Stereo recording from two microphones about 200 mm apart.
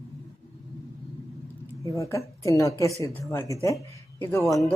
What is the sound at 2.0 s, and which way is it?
A woman's voice, 15° left (ahead or behind).